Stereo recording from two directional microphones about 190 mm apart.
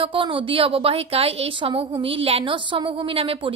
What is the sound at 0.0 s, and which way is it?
A woman's voice, 25° right (ahead or behind).